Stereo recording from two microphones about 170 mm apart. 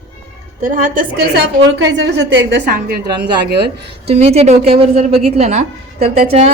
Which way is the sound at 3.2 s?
80° right.